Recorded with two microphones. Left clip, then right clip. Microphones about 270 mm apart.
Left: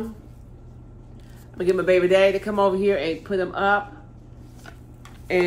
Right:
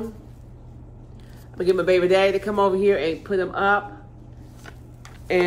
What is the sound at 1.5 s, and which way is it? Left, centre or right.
A man's voice, centre.